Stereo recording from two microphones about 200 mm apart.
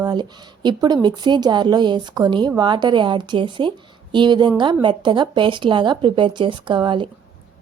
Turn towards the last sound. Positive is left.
turn(degrees=-25)  # may be behind; listen again after turning